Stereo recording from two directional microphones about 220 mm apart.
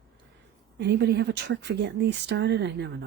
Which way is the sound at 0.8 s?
50° right (ahead or behind).